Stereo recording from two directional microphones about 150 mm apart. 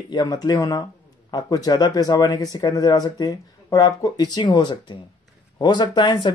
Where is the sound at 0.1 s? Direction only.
25° left (ahead or behind).